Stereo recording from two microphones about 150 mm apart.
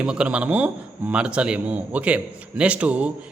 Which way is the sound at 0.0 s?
5° right (ahead or behind).